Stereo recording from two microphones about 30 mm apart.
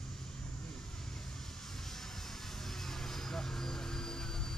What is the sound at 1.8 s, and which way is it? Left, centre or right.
Vehicle, centre.